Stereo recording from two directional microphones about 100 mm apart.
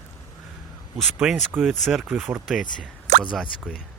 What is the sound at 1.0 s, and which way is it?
Speech, centre (ahead or behind).